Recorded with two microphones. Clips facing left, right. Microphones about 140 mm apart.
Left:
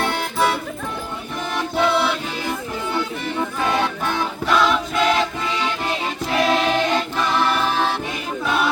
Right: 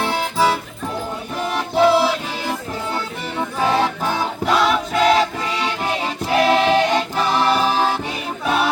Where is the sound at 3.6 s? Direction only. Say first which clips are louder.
Right 4 dB; 30° right (ahead or behind).